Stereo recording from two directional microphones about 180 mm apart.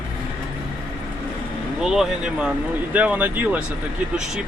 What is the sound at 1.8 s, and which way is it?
Speech, 5° right (ahead or behind).